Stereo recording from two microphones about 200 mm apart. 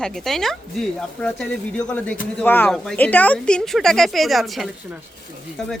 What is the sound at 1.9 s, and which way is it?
A woman's voice, 5° left (ahead or behind).